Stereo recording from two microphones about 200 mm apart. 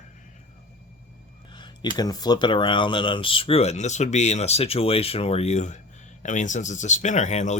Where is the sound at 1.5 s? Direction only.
20° left (ahead or behind).